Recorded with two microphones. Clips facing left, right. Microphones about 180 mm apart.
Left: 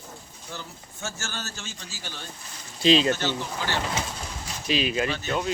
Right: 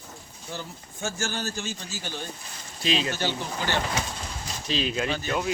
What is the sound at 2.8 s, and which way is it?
Speech, 30° left (ahead or behind).